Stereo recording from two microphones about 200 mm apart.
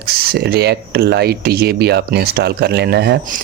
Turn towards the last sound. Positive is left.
turn(degrees=-55)  # may be behind; listen again after turning